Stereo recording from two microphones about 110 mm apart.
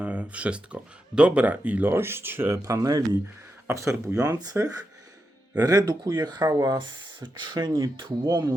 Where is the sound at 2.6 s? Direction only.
30° right (ahead or behind).